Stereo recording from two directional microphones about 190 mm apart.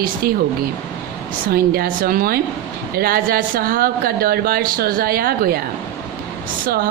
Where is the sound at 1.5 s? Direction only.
50° right (ahead or behind).